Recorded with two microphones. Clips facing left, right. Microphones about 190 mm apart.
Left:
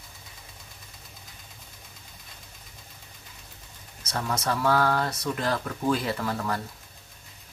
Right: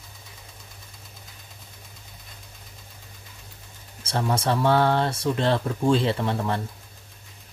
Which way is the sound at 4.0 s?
30° right (ahead or behind).